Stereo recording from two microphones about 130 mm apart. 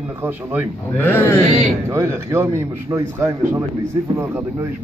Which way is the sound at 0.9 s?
15° left (ahead or behind).